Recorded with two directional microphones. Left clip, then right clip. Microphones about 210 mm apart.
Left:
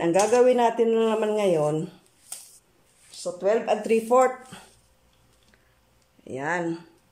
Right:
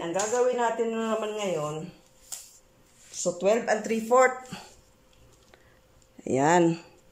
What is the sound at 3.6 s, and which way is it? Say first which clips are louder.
Speech: left 4 dB; 15° left (ahead or behind).